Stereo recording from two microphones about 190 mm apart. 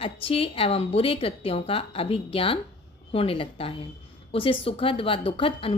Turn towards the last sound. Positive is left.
turn(degrees=30)  # may be behind; listen again after turning